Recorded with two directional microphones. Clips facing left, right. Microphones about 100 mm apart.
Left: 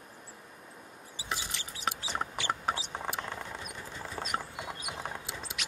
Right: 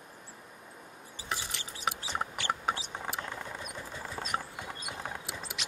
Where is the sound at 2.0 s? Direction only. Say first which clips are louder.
Even; 15° left (ahead or behind).